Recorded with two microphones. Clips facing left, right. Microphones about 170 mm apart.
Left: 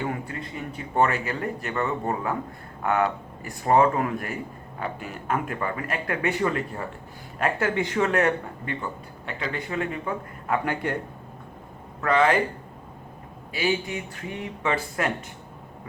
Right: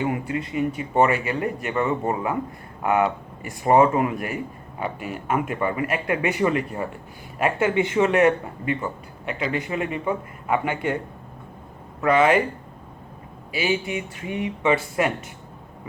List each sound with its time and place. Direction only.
0.0 s speech: 15° right (ahead or behind)
12.0 s speech: 15° right (ahead or behind)
13.7 s speech: 10° right (ahead or behind)